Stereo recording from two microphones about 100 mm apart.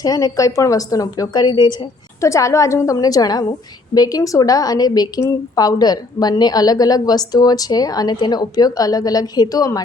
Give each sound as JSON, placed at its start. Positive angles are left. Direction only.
{"t": 0.0, "sound": "a woman's voice", "side_deg": 40}
{"t": 2.2, "sound": "a woman's voice", "side_deg": 30}